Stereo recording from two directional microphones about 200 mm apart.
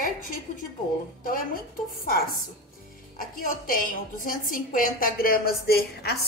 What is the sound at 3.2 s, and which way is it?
A woman's voice, 45° left (ahead or behind).